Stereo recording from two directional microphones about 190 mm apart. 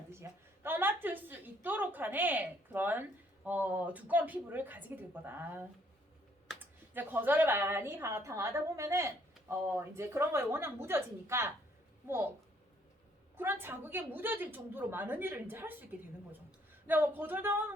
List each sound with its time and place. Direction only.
0.1 s a woman's voice: 10° right (ahead or behind)
6.9 s a woman's voice: 10° right (ahead or behind)
13.3 s a woman's voice: 10° right (ahead or behind)